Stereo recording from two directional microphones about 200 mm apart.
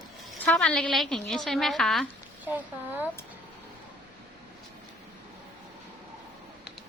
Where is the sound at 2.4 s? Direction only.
10° right (ahead or behind).